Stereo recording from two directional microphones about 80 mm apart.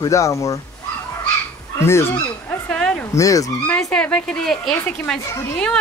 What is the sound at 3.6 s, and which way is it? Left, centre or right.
Speech, centre.